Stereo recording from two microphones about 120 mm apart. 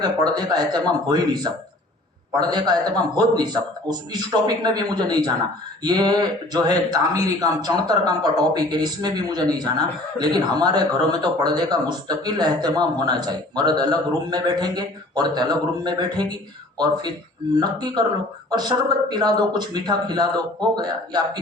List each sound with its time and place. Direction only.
0.3 s a man's voice: 35° right (ahead or behind)
2.4 s a man's voice: 35° right (ahead or behind)